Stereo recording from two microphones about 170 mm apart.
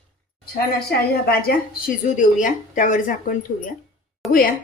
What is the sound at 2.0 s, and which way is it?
A woman's voice, 50° left (ahead or behind).